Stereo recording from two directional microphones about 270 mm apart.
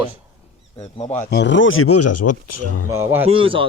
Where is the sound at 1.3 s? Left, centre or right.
Left.